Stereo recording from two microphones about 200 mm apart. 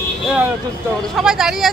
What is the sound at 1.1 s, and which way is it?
Speech, 5° right (ahead or behind).